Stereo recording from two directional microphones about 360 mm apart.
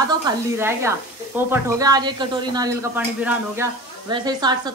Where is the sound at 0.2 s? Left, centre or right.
Centre.